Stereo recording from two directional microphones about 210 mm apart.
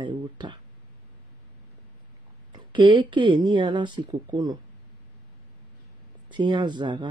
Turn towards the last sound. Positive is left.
turn(degrees=-20)  # may be behind; listen again after turning